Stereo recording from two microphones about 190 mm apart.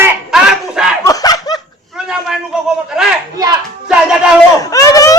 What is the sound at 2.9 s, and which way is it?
Speech, 5° right (ahead or behind).